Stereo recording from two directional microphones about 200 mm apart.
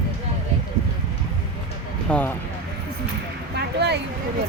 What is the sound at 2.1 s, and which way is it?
Speech, 5° left (ahead or behind).